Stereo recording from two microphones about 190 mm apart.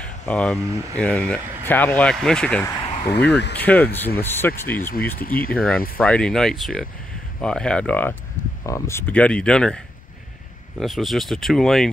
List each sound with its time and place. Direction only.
0.0 s speech: 5° left (ahead or behind)
3.3 s speech: 65° left (ahead or behind)
3.5 s speech: 10° left (ahead or behind)
5.2 s speech: 50° left (ahead or behind)
5.5 s speech: 5° left (ahead or behind)
10.8 s speech: centre (ahead or behind)